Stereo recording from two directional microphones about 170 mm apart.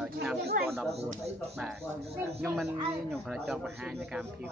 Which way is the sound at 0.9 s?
40° right (ahead or behind).